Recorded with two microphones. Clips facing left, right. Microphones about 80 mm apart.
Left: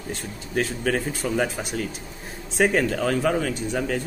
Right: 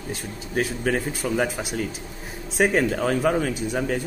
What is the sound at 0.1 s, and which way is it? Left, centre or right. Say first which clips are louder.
A man's voice: even; centre.